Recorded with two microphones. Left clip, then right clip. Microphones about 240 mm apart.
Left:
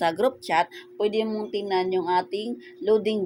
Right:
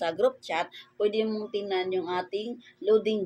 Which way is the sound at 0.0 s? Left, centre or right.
Left.